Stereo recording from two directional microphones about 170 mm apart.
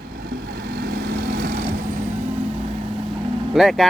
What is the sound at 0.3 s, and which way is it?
Vehicle, 75° right (ahead or behind).